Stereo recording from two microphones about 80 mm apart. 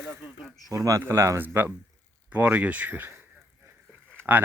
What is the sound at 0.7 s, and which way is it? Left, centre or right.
Speech, right.